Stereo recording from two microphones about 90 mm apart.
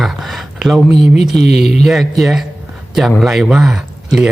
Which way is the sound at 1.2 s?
Centre (ahead or behind).